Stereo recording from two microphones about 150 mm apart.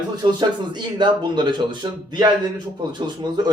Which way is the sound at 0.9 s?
30° right (ahead or behind).